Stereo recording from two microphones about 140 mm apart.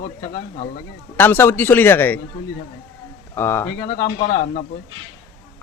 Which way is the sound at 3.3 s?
15° left (ahead or behind).